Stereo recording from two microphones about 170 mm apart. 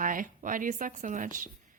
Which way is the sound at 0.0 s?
50° right (ahead or behind).